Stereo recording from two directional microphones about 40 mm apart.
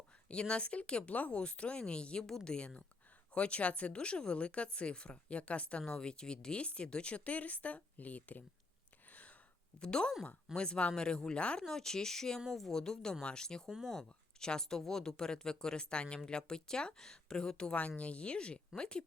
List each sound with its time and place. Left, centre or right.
0.3 s speech: left
9.0 s a sound: left
9.7 s speech: left
11.6 s speech: centre
12.7 s speech: centre
13.8 s speech: centre
14.3 s speech: centre
17.7 s speech: left